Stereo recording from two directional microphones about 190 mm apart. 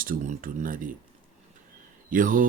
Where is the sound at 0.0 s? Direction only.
45° right (ahead or behind).